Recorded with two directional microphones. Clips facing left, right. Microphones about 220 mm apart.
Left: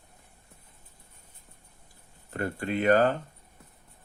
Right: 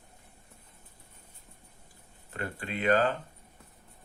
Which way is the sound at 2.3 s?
45° left (ahead or behind).